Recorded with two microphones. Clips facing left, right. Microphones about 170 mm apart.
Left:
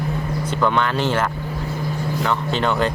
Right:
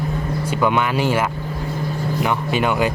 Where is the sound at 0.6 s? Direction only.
10° right (ahead or behind).